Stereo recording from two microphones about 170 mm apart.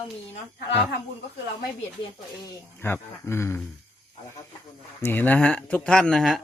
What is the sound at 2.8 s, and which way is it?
Speech, 15° left (ahead or behind).